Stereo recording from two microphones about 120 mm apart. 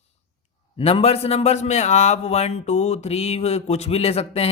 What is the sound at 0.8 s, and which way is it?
A man's voice, 55° left (ahead or behind).